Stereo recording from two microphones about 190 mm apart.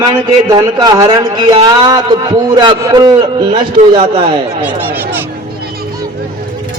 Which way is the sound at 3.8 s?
40° right (ahead or behind).